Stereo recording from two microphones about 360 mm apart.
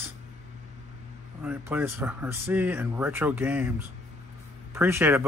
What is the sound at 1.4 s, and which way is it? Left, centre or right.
Speech, centre.